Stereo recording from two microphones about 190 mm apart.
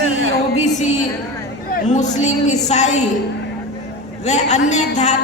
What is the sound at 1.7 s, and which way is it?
A woman's voice, 40° left (ahead or behind).